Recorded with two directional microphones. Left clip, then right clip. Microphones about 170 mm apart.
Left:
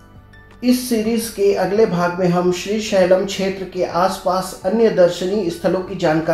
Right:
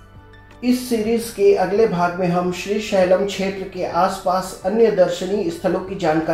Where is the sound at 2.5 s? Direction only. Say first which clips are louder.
Left 2 dB; 25° left (ahead or behind).